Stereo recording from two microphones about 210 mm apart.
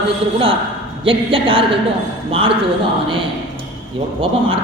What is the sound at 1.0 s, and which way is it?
Speech, 25° right (ahead or behind).